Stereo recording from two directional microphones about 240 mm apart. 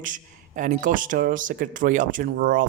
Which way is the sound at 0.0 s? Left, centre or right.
Right.